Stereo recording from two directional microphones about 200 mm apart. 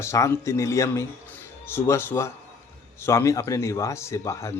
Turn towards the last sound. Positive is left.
turn(degrees=15)  # may be behind; listen again after turning